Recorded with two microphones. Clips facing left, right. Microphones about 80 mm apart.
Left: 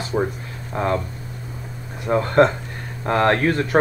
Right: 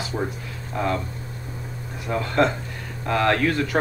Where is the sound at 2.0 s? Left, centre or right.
Left.